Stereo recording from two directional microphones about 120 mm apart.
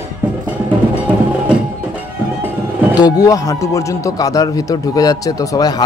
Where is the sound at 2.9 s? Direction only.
35° left (ahead or behind).